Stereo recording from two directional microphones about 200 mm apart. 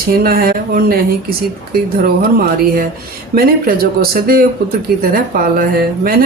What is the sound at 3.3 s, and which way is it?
Speech, 50° right (ahead or behind).